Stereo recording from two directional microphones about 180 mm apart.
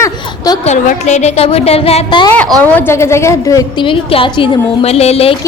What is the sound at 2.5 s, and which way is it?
A woman's voice, 10° left (ahead or behind).